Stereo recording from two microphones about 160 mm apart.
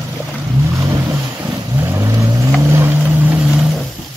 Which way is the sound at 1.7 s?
20° right (ahead or behind).